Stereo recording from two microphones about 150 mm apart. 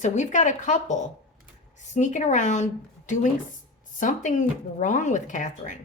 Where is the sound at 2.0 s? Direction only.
55° left (ahead or behind).